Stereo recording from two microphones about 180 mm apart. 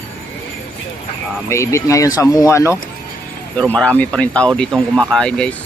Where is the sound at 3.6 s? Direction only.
5° left (ahead or behind).